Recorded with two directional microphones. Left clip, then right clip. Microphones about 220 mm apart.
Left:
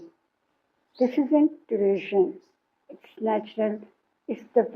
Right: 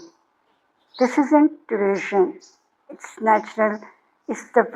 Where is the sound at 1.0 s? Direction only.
40° right (ahead or behind).